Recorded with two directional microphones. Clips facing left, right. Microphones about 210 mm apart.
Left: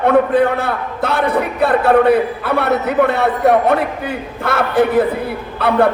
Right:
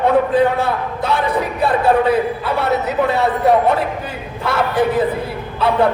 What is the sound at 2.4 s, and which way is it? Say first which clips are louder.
A man's voice: left 2 dB; 60° left (ahead or behind).